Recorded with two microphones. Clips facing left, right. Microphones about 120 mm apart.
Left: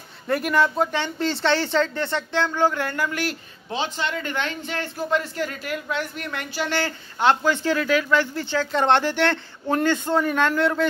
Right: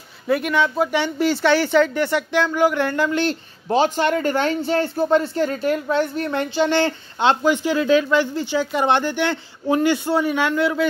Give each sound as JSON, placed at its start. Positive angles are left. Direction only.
{"t": 0.3, "sound": "speech", "side_deg": 0}
{"t": 0.9, "sound": "speech", "side_deg": -10}
{"t": 3.6, "sound": "speech", "side_deg": -45}